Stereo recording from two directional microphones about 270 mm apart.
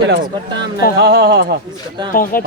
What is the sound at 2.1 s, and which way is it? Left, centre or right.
Speech, left.